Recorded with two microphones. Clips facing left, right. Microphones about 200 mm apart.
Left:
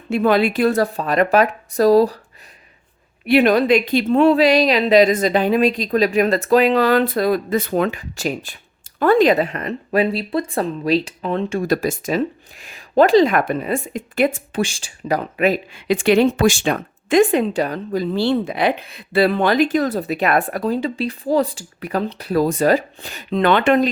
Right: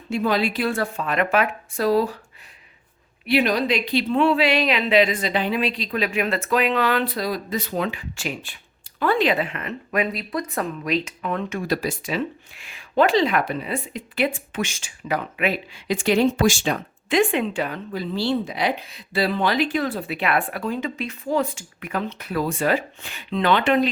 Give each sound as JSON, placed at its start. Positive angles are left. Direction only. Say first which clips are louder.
{"t": 0.1, "sound": "speech", "louder": "left 6 dB", "side_deg": 55}
{"t": 3.2, "sound": "speech", "louder": "left 7 dB", "side_deg": 55}
{"t": 11.6, "sound": "speech", "louder": "left 5 dB", "side_deg": 45}
{"t": 15.9, "sound": "speech", "louder": "left 5 dB", "side_deg": 65}